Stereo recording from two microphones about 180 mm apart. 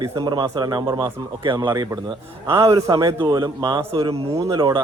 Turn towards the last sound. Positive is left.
turn(degrees=-20)  # may be behind; listen again after turning